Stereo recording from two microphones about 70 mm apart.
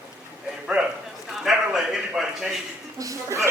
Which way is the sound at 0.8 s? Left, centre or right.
Centre.